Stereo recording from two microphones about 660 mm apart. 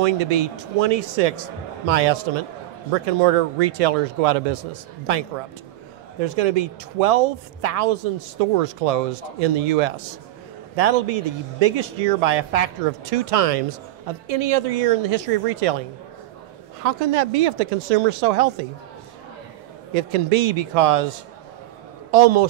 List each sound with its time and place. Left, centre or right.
0.0 s a woman's voice: right
6.2 s a woman's voice: right
16.8 s speech: right
19.9 s a woman's voice: right
22.1 s a woman's voice: right